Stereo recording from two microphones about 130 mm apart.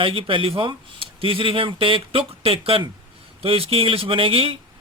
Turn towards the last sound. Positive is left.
turn(degrees=-45)  # may be behind; listen again after turning